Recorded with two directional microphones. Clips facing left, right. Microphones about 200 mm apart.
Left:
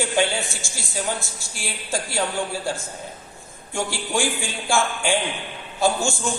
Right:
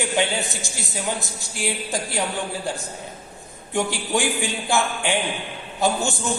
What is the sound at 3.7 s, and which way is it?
A woman's voice, 20° right (ahead or behind).